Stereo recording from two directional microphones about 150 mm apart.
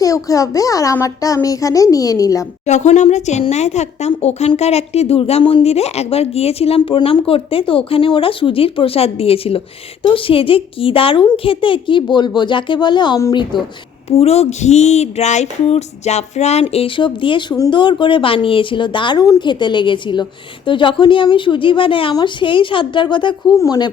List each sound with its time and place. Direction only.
0.0 s a child's voice: 25° left (ahead or behind)
2.6 s a woman's voice: 50° left (ahead or behind); by 13.6 s 30° left (ahead or behind)
14.2 s a woman's voice: 45° left (ahead or behind); by 23.9 s 25° left (ahead or behind)